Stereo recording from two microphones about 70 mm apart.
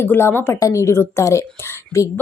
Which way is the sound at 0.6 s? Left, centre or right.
Left.